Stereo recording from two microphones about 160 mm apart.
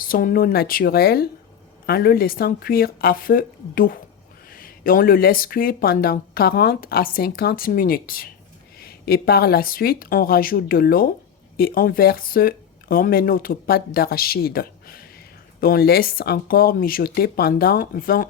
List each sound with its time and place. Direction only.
0.0 s speech: 60° left (ahead or behind)